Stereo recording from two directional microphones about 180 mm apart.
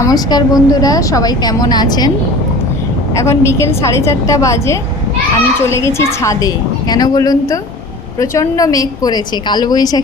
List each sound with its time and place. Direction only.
0.0 s a woman's voice: 20° left (ahead or behind)
3.2 s a woman's voice: 15° left (ahead or behind)